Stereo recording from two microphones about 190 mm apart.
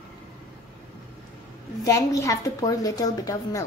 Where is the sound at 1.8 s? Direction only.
15° left (ahead or behind).